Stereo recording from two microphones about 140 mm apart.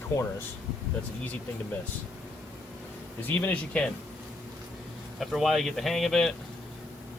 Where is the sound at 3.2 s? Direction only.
10° left (ahead or behind).